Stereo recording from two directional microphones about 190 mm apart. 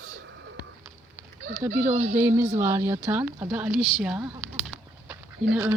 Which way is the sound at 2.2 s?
10° right (ahead or behind).